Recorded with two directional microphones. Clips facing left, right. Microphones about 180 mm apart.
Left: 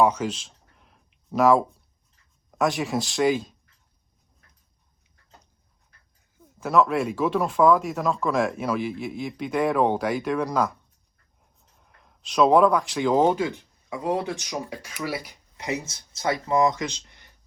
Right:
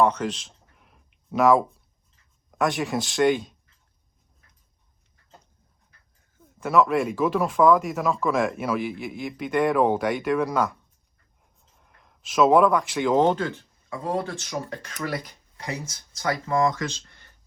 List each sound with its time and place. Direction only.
0.0 s a sound: 5° left (ahead or behind)
2.5 s speech: centre (ahead or behind)
6.6 s speech: centre (ahead or behind)
11.8 s speech: centre (ahead or behind)
15.5 s speech: 20° left (ahead or behind)